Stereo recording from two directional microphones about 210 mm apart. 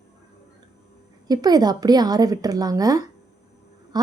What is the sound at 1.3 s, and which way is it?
A woman's voice, 20° right (ahead or behind).